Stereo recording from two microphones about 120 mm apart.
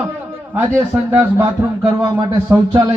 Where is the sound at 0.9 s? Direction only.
25° right (ahead or behind).